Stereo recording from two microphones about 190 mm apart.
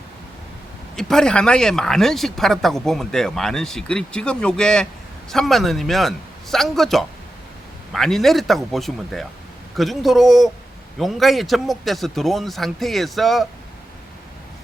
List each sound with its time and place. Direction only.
0.9 s speech: centre (ahead or behind)